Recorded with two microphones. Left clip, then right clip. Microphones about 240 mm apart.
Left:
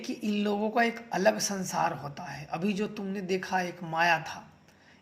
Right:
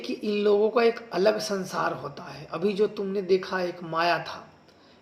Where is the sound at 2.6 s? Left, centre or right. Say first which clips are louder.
Right 11 dB; left.